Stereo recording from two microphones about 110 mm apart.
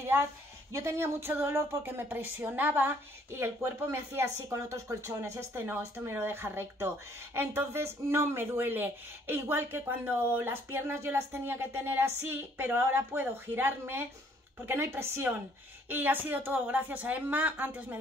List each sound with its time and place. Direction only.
0.0 s a woman's voice: 25° right (ahead or behind)